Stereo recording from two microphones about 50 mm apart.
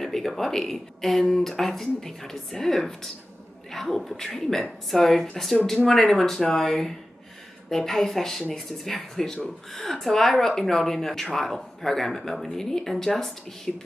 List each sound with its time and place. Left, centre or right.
0.0 s speech: centre